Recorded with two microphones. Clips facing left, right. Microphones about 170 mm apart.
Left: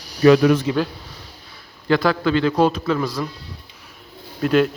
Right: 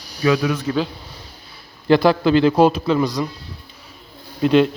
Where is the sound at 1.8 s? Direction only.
25° right (ahead or behind).